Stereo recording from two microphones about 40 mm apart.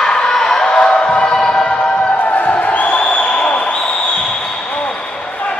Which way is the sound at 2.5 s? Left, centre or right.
Left.